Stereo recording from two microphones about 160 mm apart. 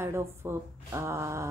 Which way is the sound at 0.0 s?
15° right (ahead or behind).